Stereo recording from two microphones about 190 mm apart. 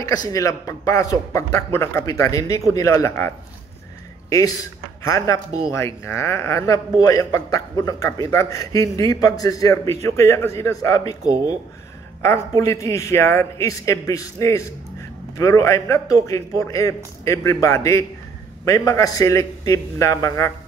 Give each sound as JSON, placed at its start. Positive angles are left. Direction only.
{"t": 0.0, "sound": "a man's voice", "side_deg": 20}